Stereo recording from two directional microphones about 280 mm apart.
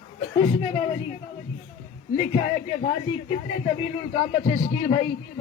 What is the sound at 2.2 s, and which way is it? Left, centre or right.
A man's voice, left.